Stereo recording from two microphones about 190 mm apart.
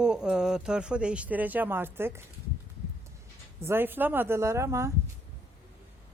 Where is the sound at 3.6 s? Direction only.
10° right (ahead or behind).